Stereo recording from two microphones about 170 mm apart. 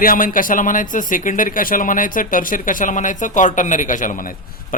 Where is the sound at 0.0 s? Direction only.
55° left (ahead or behind).